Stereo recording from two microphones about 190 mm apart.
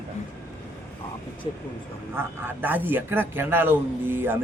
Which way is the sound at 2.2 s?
10° right (ahead or behind).